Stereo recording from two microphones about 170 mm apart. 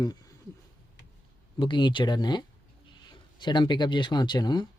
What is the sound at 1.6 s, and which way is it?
Speech, 30° left (ahead or behind).